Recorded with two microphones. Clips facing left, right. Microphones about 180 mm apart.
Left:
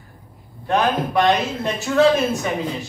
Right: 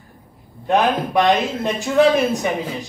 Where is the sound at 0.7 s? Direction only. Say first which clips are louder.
Right 2 dB; 20° right (ahead or behind).